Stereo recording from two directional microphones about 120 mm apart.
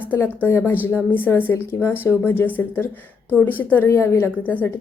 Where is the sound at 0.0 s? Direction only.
15° left (ahead or behind).